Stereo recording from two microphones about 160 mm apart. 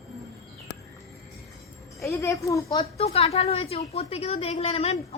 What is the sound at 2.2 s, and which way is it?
Speech, 20° left (ahead or behind).